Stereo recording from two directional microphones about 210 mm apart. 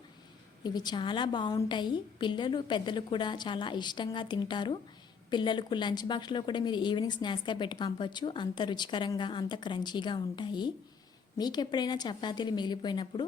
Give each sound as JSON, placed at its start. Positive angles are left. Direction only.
{"t": 0.6, "sound": "a woman's voice", "side_deg": 20}